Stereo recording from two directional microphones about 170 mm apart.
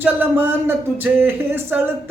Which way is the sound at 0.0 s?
10° right (ahead or behind).